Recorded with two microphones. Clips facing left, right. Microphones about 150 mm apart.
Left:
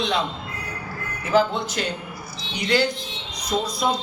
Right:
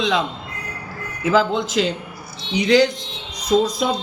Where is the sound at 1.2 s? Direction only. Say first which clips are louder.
Right 2 dB; 90° right.